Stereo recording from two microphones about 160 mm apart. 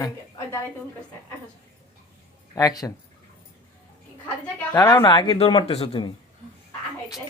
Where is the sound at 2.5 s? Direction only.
20° left (ahead or behind).